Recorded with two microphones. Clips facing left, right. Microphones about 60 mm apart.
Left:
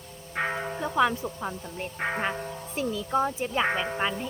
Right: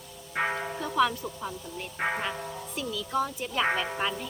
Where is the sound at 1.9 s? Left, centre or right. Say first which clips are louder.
Right 1 dB; centre.